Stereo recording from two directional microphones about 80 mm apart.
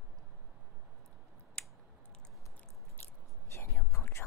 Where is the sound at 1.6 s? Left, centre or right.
Centre.